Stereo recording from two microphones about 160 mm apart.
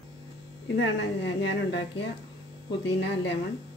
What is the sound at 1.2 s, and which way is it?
Speech, 90° left.